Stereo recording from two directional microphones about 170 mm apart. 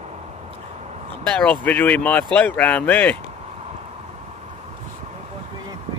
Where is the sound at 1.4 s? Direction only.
10° left (ahead or behind).